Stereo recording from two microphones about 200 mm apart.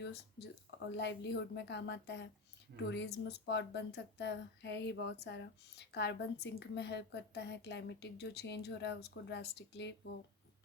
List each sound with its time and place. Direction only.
0.0 s speech: 55° left (ahead or behind)